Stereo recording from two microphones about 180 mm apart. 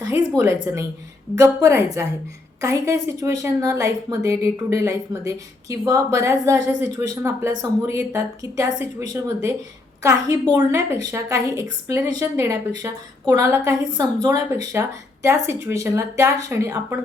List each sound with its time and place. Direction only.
0.0 s a woman's voice: 20° right (ahead or behind)